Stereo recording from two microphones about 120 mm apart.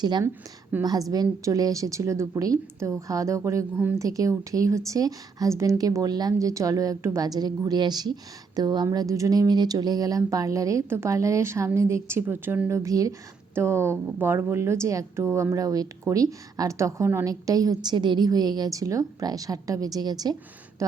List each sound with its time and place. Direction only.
0.0 s a woman's voice: 35° right (ahead or behind)